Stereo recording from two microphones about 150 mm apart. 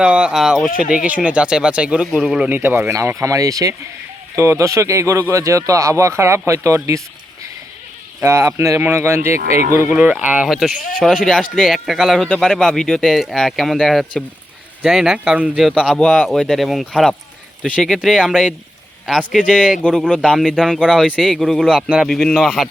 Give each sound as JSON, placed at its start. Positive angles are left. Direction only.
{"t": 0.0, "sound": "speech", "side_deg": -5}
{"t": 8.2, "sound": "speech", "side_deg": -20}
{"t": 19.8, "sound": "speech", "side_deg": 5}